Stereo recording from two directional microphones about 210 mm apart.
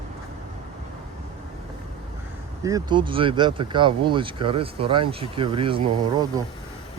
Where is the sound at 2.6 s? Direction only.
20° right (ahead or behind).